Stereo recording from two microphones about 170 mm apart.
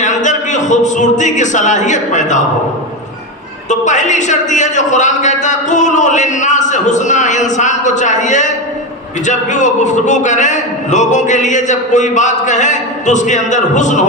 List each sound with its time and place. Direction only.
0.0 s speech: 45° left (ahead or behind)
3.7 s a man's voice: 45° left (ahead or behind)